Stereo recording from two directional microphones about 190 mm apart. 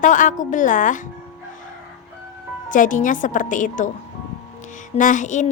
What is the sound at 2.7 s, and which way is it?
Speech, 45° left (ahead or behind).